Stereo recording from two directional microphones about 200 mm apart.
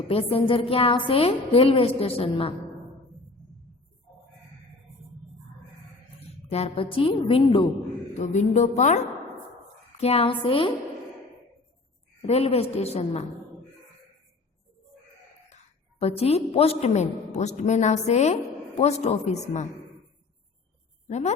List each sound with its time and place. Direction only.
0.1 s a woman's voice: 30° left (ahead or behind)
6.5 s a woman's voice: 30° left (ahead or behind)
8.2 s a woman's voice: 35° left (ahead or behind)
12.2 s a woman's voice: 30° left (ahead or behind)
16.0 s a woman's voice: 30° left (ahead or behind)
21.1 s a woman's voice: 35° left (ahead or behind)